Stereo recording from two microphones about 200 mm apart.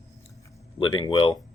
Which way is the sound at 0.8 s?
25° left (ahead or behind).